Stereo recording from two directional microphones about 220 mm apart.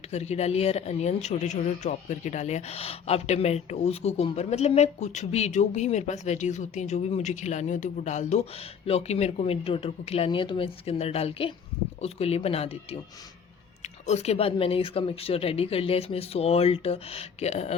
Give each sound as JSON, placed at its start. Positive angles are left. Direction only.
{"t": 0.1, "sound": "speech", "side_deg": 30}